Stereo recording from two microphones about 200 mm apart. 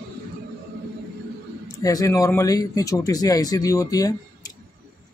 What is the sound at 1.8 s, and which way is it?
Speech, 15° left (ahead or behind).